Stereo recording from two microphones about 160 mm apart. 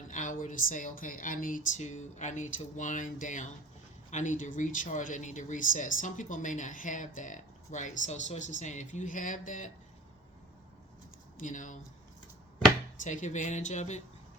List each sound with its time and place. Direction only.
0.1 s speech: 55° left (ahead or behind)
11.3 s speech: 55° left (ahead or behind)
13.0 s speech: 50° left (ahead or behind)